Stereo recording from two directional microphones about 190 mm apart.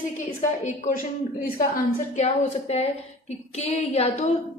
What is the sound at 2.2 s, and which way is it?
A woman's voice, 35° left (ahead or behind).